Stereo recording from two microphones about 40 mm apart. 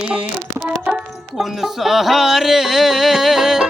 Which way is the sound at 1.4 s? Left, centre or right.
Centre.